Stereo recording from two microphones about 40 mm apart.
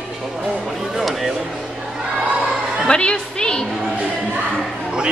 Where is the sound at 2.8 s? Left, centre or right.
Left.